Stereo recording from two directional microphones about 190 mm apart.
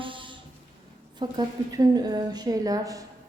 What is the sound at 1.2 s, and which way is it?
A woman's voice, 20° right (ahead or behind).